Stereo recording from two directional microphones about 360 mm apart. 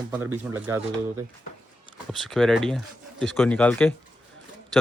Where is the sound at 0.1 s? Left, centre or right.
Centre.